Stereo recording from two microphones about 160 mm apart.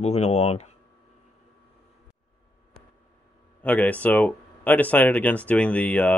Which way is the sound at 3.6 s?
10° left (ahead or behind).